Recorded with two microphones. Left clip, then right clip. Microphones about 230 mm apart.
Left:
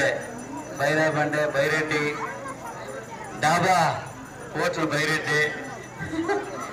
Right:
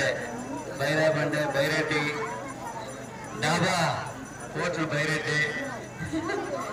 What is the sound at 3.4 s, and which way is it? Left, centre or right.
A man's voice, centre.